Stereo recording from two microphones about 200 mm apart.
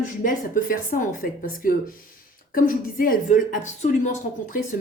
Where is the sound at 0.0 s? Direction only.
40° left (ahead or behind).